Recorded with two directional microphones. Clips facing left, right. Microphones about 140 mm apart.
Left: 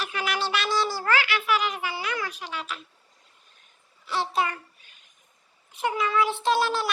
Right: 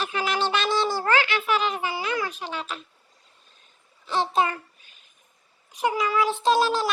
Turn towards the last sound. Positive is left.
turn(degrees=-20)  # may be behind; listen again after turning